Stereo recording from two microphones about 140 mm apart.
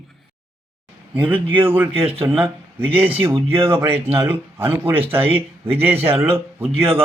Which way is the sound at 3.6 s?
40° right (ahead or behind).